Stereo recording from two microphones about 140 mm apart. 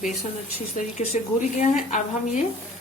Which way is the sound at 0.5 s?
50° left (ahead or behind).